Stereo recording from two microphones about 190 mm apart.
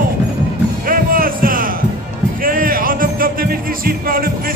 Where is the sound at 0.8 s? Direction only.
50° right (ahead or behind).